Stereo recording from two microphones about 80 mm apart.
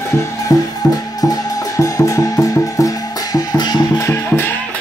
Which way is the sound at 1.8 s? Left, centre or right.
Left.